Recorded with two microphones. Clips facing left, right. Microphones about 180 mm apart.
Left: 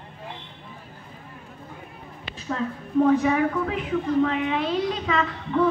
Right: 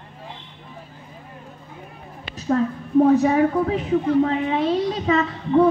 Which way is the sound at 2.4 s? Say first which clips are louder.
Right 8 dB; 40° right (ahead or behind).